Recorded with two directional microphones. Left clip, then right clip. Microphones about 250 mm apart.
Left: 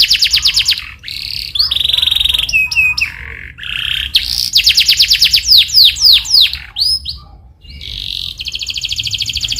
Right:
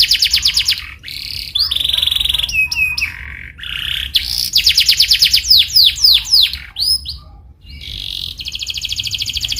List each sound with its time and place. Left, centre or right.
0.0 s bird: centre
3.7 s chirp: centre
7.9 s bird: centre